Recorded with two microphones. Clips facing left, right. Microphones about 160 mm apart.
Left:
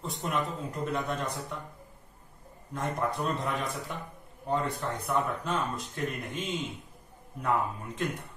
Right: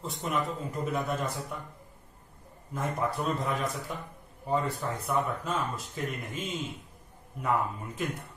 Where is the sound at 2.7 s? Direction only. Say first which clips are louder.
Even; centre (ahead or behind).